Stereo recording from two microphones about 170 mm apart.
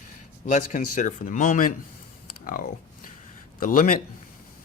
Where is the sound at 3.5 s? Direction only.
55° left (ahead or behind).